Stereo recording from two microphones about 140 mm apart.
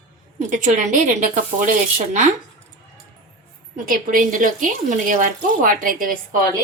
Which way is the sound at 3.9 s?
75° right (ahead or behind).